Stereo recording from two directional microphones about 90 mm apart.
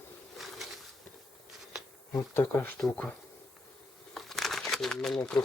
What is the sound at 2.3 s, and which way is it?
Speech, 25° left (ahead or behind).